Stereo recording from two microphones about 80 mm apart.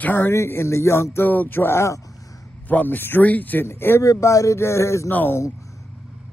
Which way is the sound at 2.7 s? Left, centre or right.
Left.